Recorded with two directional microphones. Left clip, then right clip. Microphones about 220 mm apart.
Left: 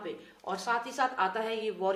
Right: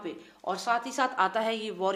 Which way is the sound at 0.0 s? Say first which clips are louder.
Right 3 dB; 40° right (ahead or behind).